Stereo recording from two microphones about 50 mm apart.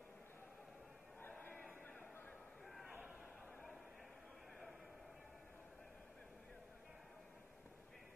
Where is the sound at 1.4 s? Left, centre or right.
Left.